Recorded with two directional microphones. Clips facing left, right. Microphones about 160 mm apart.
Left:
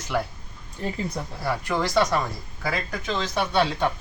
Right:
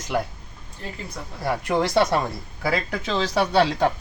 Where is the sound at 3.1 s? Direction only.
35° right (ahead or behind).